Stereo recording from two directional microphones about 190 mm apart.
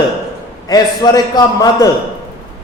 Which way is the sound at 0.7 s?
20° left (ahead or behind).